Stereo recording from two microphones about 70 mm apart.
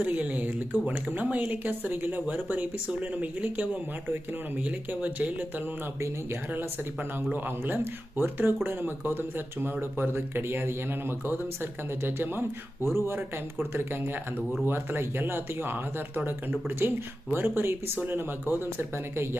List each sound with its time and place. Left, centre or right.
0.0 s speech: right
4.9 s speech: right
7.3 s speech: right